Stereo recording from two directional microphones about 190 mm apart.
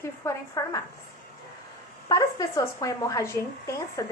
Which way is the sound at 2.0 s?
20° left (ahead or behind).